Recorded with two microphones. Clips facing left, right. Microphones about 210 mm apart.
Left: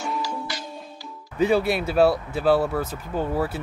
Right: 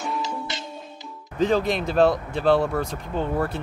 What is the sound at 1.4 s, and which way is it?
Speech, 10° left (ahead or behind).